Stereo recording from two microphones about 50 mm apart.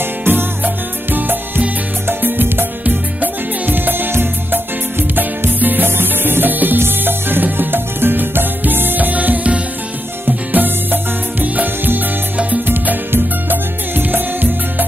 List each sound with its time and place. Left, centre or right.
0.0 s music: right
2.8 s music: right